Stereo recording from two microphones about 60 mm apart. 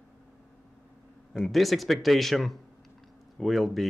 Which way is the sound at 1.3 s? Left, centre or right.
Centre.